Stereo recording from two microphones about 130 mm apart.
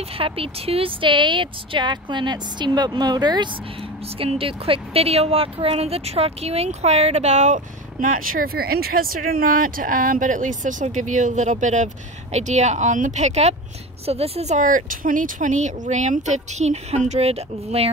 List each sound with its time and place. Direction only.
0.2 s speech: 50° right (ahead or behind); by 3.4 s 30° right (ahead or behind)
4.2 s speech: 45° right (ahead or behind)